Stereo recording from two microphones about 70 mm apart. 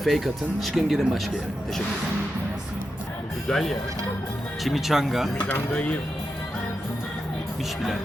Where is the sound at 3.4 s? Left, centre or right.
Centre.